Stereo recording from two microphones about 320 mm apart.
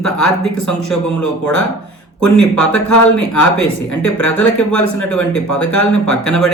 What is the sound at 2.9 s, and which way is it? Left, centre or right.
A man's voice, left.